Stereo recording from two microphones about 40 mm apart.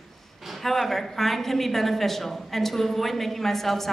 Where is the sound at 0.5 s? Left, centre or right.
Centre.